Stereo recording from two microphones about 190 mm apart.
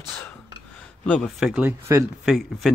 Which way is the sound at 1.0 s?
5° left (ahead or behind).